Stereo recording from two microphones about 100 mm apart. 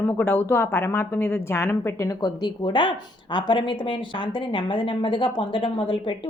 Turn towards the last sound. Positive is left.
turn(degrees=55)  # may be behind; listen again after turning